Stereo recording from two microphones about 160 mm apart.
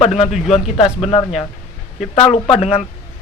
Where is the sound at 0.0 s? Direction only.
40° left (ahead or behind).